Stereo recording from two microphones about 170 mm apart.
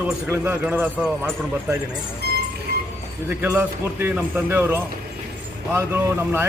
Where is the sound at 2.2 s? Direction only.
70° right (ahead or behind).